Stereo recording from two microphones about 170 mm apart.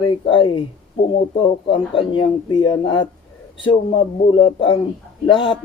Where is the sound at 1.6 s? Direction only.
30° left (ahead or behind).